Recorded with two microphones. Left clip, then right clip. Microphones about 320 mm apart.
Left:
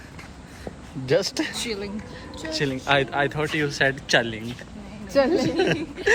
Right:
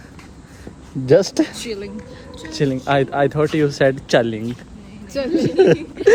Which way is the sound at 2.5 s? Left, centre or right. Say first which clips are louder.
Right 4 dB; right.